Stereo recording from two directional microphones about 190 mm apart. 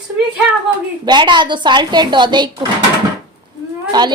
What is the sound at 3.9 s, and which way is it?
Speech, 20° right (ahead or behind).